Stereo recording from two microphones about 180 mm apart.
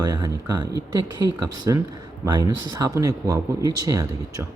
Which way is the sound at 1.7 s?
20° right (ahead or behind).